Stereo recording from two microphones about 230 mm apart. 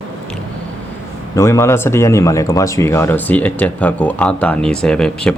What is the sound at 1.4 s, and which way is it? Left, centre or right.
Speech, centre.